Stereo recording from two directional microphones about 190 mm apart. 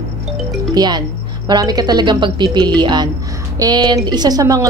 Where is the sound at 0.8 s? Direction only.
20° right (ahead or behind).